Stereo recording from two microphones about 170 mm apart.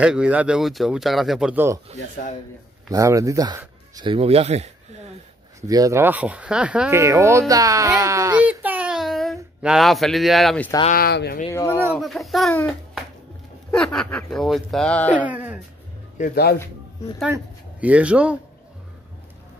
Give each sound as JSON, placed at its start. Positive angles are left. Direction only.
{"t": 0.0, "sound": "a man's voice", "side_deg": -5}
{"t": 2.9, "sound": "speech", "side_deg": -20}
{"t": 5.7, "sound": "speech", "side_deg": -20}
{"t": 10.9, "sound": "speech", "side_deg": 65}
{"t": 11.5, "sound": "speech", "side_deg": 15}
{"t": 12.0, "sound": "a man's voice", "side_deg": 0}
{"t": 13.9, "sound": "a man's voice", "side_deg": 5}
{"t": 15.1, "sound": "speech", "side_deg": -10}
{"t": 17.3, "sound": "speech", "side_deg": -10}